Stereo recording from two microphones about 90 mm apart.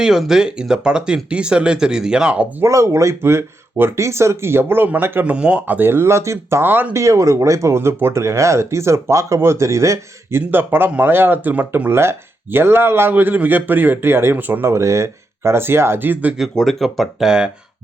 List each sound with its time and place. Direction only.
0.0 s speech: 5° right (ahead or behind)
2.6 s speech: 35° right (ahead or behind)
7.0 s speech: 35° right (ahead or behind); by 16.3 s 20° right (ahead or behind)
16.4 s speech: centre (ahead or behind)